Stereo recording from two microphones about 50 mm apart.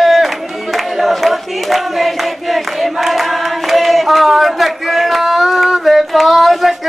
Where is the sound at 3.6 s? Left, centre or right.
Centre.